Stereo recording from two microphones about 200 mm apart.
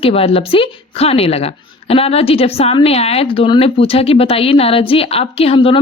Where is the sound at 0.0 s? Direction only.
30° left (ahead or behind).